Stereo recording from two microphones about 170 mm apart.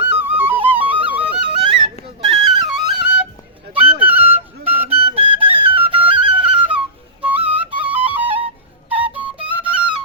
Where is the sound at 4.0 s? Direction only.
10° right (ahead or behind).